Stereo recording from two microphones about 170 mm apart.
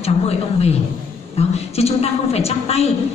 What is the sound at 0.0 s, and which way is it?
A woman's voice, 35° left (ahead or behind).